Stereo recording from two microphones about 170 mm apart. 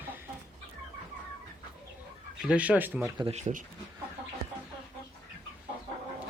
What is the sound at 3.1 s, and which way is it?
Speech, 35° right (ahead or behind).